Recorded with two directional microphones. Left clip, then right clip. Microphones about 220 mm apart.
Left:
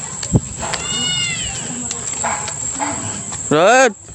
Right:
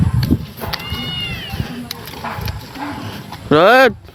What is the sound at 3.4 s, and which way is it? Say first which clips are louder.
Speech: right 2 dB; 10° right (ahead or behind).